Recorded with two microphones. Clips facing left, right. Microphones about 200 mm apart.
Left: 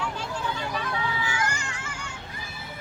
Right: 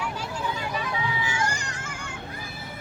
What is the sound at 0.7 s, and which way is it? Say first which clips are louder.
Vehicle: even; 10° right (ahead or behind).